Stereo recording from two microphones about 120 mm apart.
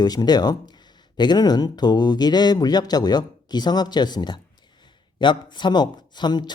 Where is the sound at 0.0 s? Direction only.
35° left (ahead or behind).